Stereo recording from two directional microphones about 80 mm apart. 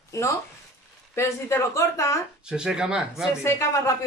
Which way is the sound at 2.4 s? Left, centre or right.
Centre.